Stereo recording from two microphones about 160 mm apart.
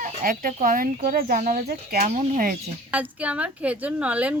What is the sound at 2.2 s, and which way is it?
Speech, 55° right (ahead or behind).